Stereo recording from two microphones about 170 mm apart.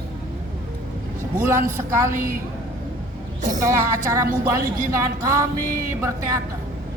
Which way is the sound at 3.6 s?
20° right (ahead or behind).